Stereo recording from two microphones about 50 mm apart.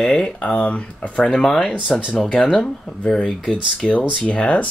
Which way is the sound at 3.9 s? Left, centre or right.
Left.